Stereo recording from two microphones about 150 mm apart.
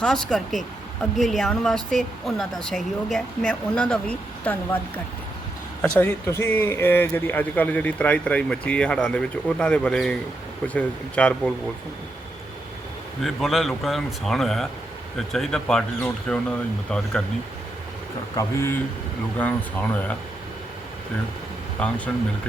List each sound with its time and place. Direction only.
0.0 s speech: 5° left (ahead or behind)
6.0 s speech: 20° left (ahead or behind)
13.2 s speech: centre (ahead or behind)
18.3 s speech: 15° left (ahead or behind)
21.8 s speech: 10° left (ahead or behind)